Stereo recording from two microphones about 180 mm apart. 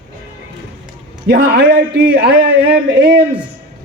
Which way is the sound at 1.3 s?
60° right (ahead or behind).